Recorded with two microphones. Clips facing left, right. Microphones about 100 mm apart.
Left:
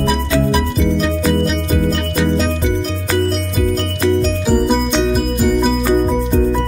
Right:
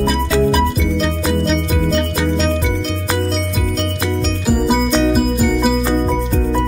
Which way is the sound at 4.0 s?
10° right (ahead or behind).